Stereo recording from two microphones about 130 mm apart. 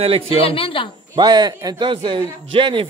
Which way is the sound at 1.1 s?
35° right (ahead or behind).